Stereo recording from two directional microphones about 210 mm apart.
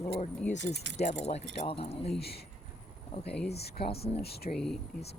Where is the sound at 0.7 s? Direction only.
55° right (ahead or behind).